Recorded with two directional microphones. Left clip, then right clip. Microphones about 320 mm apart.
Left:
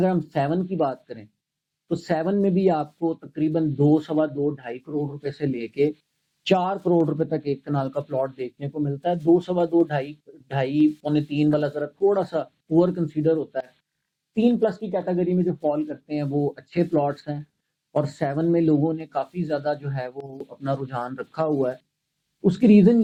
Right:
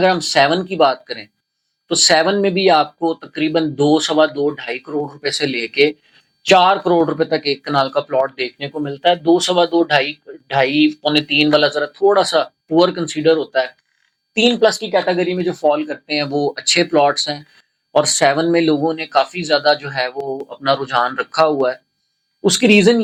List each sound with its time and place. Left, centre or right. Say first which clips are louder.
0.3 s speech: right 10 dB; centre
16.3 s speech: right 4 dB; centre
16.6 s speech: right 13 dB; centre
20.3 s speech: right 11 dB; centre